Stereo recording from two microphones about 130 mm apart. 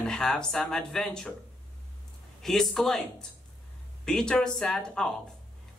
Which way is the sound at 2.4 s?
5° left (ahead or behind).